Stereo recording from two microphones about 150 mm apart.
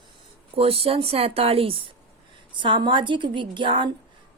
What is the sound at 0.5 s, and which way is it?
A woman's voice, 40° right (ahead or behind).